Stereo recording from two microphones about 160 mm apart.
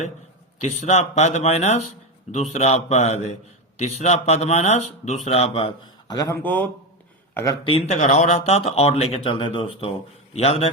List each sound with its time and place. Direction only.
0.6 s speech: 40° left (ahead or behind); by 6.4 s 20° left (ahead or behind)
6.4 s a man's voice: 10° left (ahead or behind)
7.6 s speech: 35° left (ahead or behind)